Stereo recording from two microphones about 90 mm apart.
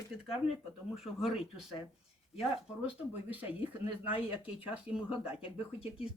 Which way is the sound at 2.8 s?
20° right (ahead or behind).